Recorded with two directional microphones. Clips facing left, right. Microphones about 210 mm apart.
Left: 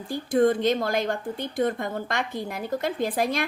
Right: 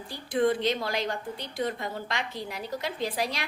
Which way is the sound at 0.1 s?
45° left (ahead or behind).